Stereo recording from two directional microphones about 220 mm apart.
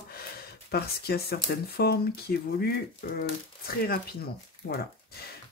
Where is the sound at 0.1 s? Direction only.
45° left (ahead or behind).